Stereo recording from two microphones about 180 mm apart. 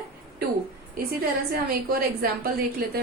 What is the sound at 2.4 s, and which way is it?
Speech, 60° right (ahead or behind).